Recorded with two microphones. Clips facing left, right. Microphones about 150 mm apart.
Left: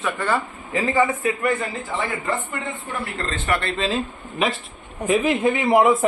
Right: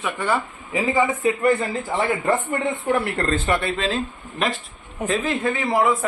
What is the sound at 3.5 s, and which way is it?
Speech, 10° right (ahead or behind).